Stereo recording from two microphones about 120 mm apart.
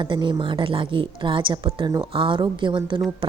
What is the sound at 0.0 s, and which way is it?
A woman's voice, 40° right (ahead or behind).